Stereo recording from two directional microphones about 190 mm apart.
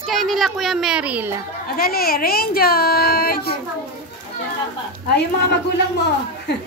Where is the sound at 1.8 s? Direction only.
50° left (ahead or behind).